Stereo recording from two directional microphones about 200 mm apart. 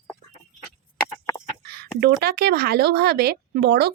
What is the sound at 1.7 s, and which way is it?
Speech, 55° right (ahead or behind).